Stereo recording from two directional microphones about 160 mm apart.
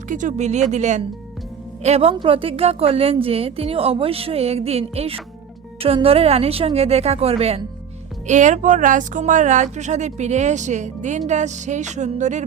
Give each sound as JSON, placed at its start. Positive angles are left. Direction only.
{"t": 0.1, "sound": "a woman's voice", "side_deg": -50}
{"t": 8.3, "sound": "speech", "side_deg": -50}